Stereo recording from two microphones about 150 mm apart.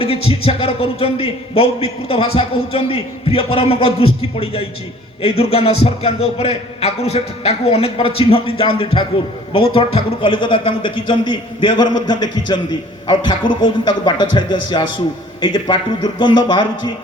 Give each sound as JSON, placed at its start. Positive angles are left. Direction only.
{"t": 0.0, "sound": "a man's voice", "side_deg": 40}